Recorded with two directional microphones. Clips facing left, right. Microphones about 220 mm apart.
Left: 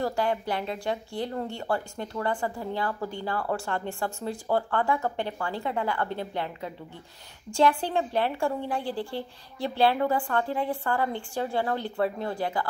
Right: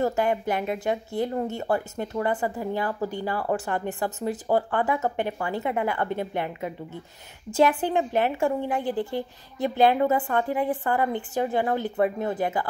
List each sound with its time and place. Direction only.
0.0 s speech: 20° right (ahead or behind)